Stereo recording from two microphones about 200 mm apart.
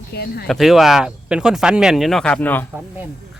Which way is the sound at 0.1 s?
50° left (ahead or behind).